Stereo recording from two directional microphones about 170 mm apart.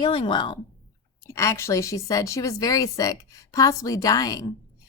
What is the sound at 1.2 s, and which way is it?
A woman's voice, 15° left (ahead or behind).